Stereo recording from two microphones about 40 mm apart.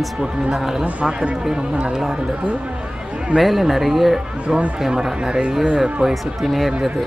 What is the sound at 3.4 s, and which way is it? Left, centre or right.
Speech, centre.